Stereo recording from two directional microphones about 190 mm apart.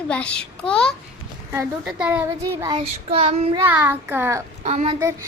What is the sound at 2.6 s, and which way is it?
Child singing, 25° right (ahead or behind).